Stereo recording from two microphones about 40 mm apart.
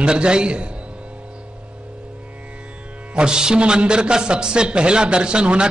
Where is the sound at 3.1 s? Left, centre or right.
Right.